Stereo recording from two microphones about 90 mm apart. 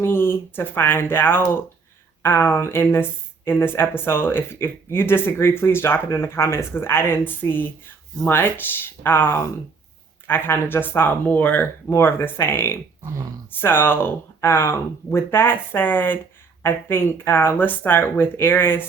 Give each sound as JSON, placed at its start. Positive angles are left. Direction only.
{"t": 0.0, "sound": "speech", "side_deg": 25}